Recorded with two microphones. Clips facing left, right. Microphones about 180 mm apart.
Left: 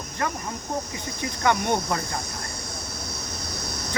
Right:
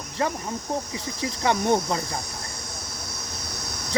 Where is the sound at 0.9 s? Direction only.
30° right (ahead or behind).